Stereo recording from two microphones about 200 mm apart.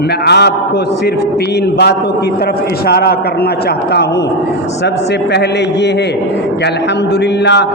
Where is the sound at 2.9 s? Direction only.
55° left (ahead or behind).